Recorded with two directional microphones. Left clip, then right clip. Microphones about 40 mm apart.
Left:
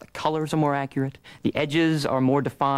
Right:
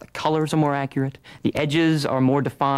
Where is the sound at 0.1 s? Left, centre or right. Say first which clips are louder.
Right 3 dB; left.